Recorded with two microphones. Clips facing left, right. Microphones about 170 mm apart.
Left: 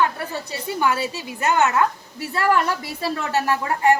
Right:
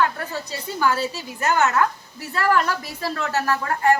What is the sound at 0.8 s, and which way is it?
A woman's voice, 15° left (ahead or behind).